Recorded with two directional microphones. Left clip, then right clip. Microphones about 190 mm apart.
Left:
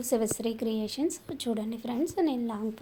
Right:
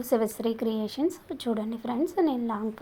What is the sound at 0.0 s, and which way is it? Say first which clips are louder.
A woman's voice: right 3 dB; 10° right (ahead or behind).